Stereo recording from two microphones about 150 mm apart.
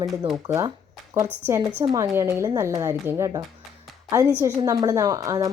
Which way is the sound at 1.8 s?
20° right (ahead or behind).